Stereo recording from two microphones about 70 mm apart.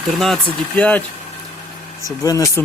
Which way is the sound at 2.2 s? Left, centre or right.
Left.